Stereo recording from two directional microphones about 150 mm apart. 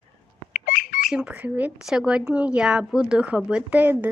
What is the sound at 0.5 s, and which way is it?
Bird, 70° left (ahead or behind).